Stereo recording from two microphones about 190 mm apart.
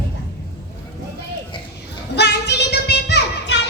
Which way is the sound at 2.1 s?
60° left (ahead or behind).